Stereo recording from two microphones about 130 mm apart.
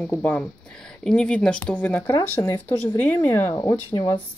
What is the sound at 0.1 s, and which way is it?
Speech, 10° left (ahead or behind).